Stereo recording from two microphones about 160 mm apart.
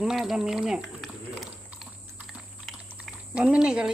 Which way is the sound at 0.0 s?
5° right (ahead or behind).